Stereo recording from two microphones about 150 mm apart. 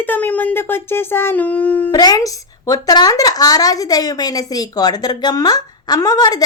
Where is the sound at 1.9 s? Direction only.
25° left (ahead or behind).